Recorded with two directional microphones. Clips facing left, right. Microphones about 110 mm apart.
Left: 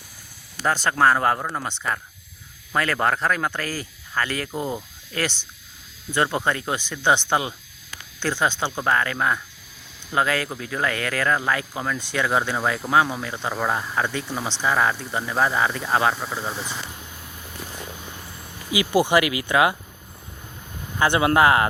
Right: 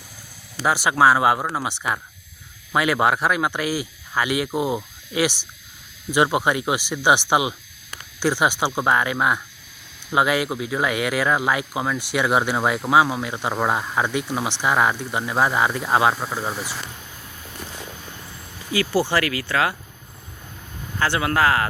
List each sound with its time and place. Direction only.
0.6 s speech: 10° right (ahead or behind)
18.7 s speech: 15° left (ahead or behind)
21.0 s speech: 20° left (ahead or behind)